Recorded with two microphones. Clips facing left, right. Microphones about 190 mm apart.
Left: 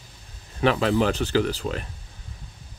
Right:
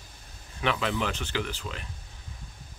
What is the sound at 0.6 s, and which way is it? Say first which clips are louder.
Speech: left 8 dB; 40° left (ahead or behind).